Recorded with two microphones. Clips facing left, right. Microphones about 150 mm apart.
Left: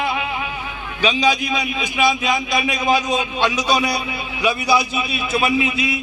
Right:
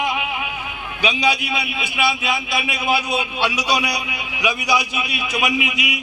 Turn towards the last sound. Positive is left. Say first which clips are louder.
# left 4 dB
turn(degrees=-15)  # may be behind; listen again after turning